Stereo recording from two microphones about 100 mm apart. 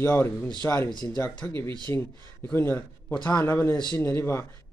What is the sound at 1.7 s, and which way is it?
Speech, 45° right (ahead or behind).